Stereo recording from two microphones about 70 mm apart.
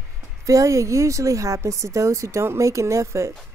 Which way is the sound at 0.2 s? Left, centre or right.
Right.